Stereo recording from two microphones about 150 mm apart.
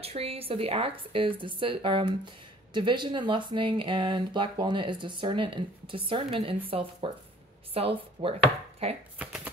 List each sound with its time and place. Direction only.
0.0 s speech: 40° right (ahead or behind)
7.7 s chopping: 40° right (ahead or behind)
9.2 s a sound: 10° right (ahead or behind)